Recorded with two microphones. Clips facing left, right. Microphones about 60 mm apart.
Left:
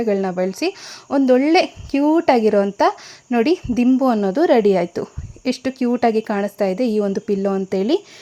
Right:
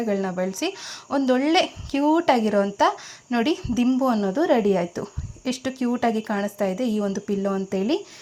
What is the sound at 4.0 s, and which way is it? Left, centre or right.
A woman's voice, left.